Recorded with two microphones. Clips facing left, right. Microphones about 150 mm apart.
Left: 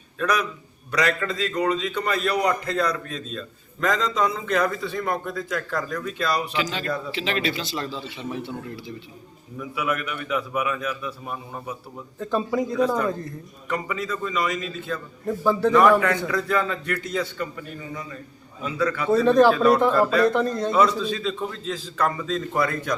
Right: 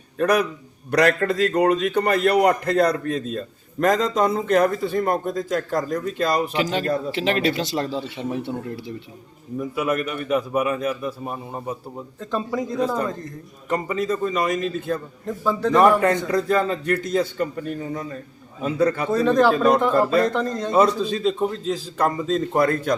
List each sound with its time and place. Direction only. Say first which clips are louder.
0.2 s a man's voice: right 5 dB; 50° right (ahead or behind); by 6.1 s 35° right (ahead or behind)
6.1 s a man's voice: right 3 dB; 45° right (ahead or behind)
9.6 s a man's voice: right 4 dB; 40° right (ahead or behind)
12.2 s a man's voice: left 2 dB; 5° left (ahead or behind)
13.7 s a man's voice: right 5 dB; 40° right (ahead or behind)
15.3 s a man's voice: left 2 dB; 10° left (ahead or behind)
16.3 s a man's voice: right 4 dB; 40° right (ahead or behind)
19.0 s speech: left 1 dB; 15° right (ahead or behind)
19.9 s a man's voice: right 2 dB; 40° right (ahead or behind)
20.3 s a man's voice: left 1 dB; 10° left (ahead or behind)
20.7 s a man's voice: right 4 dB; 35° right (ahead or behind)
22.5 s a man's voice: right 5 dB; 50° right (ahead or behind)